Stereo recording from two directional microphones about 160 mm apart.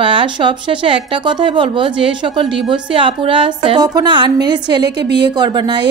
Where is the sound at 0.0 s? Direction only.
30° right (ahead or behind).